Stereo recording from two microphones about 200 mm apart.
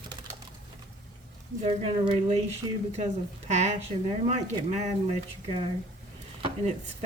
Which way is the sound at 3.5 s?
35° right (ahead or behind).